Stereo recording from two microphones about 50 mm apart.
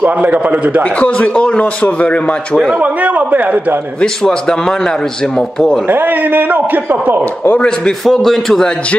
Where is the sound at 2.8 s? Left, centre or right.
Right.